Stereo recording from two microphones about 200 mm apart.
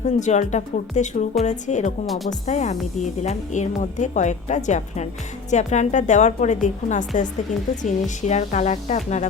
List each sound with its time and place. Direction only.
0.0 s speech: 35° left (ahead or behind)
2.0 s speech: centre (ahead or behind)
2.5 s speech: 35° left (ahead or behind)